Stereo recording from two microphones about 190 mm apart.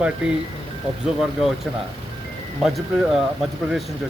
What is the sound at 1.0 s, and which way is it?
Speech, centre (ahead or behind).